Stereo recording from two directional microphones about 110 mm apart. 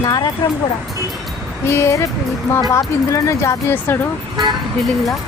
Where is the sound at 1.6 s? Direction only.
25° left (ahead or behind).